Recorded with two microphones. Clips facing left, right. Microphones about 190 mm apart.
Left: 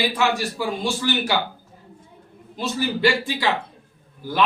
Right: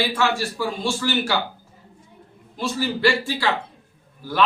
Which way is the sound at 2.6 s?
20° left (ahead or behind).